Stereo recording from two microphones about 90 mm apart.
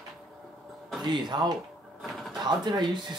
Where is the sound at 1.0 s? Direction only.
55° right (ahead or behind).